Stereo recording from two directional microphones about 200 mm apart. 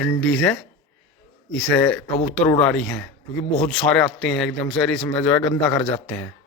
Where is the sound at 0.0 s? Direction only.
5° left (ahead or behind).